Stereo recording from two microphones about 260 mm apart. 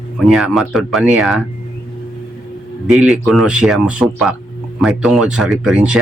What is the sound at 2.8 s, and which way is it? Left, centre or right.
A man's voice, centre.